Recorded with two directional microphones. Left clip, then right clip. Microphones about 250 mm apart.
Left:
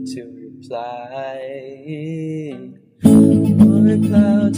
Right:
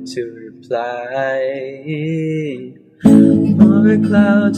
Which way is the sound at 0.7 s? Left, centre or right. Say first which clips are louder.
Right 6 dB; left.